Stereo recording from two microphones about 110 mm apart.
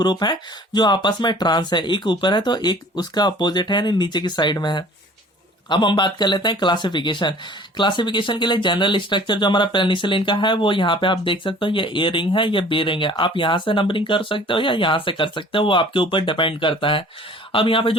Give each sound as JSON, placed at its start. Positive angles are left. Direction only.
{"t": 0.0, "sound": "speech", "side_deg": 40}